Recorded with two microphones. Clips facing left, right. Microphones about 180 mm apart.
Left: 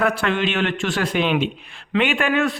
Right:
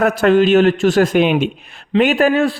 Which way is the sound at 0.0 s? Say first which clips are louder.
Right 8 dB; 40° right (ahead or behind).